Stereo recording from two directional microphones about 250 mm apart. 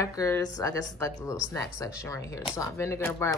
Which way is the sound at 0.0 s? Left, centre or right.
Centre.